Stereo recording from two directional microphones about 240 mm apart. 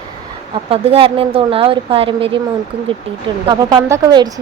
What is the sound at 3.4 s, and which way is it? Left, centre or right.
Speech, centre.